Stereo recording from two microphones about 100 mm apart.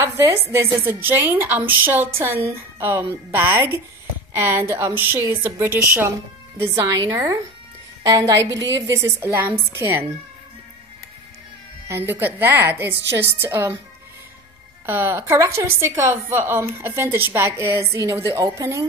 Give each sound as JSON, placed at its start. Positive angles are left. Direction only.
{"t": 0.0, "sound": "a woman's voice", "side_deg": -30}
{"t": 6.6, "sound": "a woman's voice", "side_deg": -30}
{"t": 9.3, "sound": "a woman's voice", "side_deg": -20}
{"t": 11.9, "sound": "a woman's voice", "side_deg": -20}
{"t": 14.9, "sound": "a woman's voice", "side_deg": -20}